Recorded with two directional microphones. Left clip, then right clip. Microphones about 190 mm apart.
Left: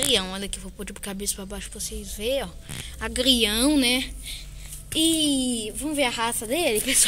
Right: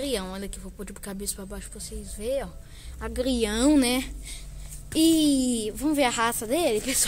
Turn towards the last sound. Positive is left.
turn(degrees=5)  # may be behind; listen again after turning